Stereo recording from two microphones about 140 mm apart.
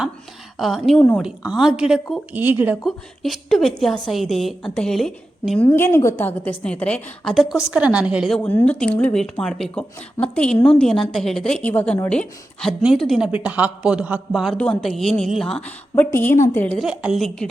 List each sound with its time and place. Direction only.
0.6 s a woman's voice: centre (ahead or behind)
2.3 s a man's voice: 15° right (ahead or behind)
2.8 s a woman's voice: centre (ahead or behind)
5.6 s a woman's voice: 15° left (ahead or behind); by 8.4 s 5° right (ahead or behind)
8.4 s a woman's voice: 10° left (ahead or behind)
16.7 s a woman's voice: 5° right (ahead or behind)